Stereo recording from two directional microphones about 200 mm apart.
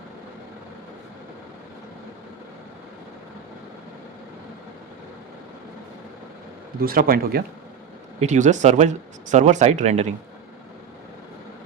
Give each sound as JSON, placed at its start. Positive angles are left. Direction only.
{"t": 6.8, "sound": "speech", "side_deg": -45}
{"t": 8.2, "sound": "speech", "side_deg": -35}